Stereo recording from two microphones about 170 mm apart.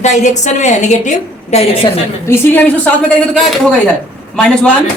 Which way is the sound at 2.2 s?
15° left (ahead or behind).